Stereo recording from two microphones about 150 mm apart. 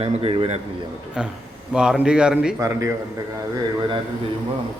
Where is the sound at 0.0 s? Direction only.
40° right (ahead or behind).